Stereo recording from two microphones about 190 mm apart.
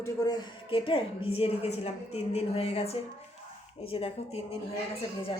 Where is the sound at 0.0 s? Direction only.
20° left (ahead or behind).